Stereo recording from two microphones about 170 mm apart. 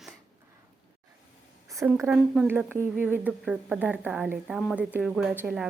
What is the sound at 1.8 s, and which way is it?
A woman's voice, 15° right (ahead or behind).